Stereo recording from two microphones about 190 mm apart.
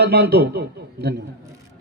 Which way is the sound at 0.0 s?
60° right (ahead or behind).